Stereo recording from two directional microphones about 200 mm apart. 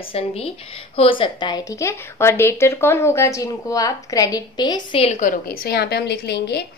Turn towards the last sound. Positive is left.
turn(degrees=55)  # may be behind; listen again after turning